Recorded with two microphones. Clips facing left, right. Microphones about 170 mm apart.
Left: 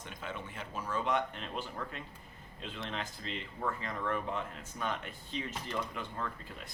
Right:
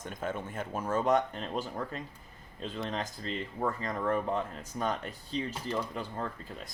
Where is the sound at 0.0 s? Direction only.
45° right (ahead or behind).